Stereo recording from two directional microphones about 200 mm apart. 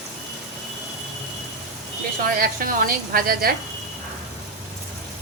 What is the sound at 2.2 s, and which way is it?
A woman's voice, 45° right (ahead or behind).